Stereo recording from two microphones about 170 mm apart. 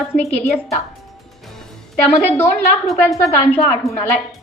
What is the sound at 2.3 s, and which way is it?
A woman's voice, 15° left (ahead or behind).